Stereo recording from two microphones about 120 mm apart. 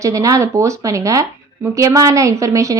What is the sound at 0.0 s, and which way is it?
Speech, 25° right (ahead or behind).